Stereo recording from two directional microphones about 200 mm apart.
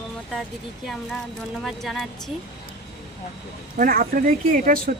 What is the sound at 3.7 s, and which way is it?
Speech, 45° right (ahead or behind).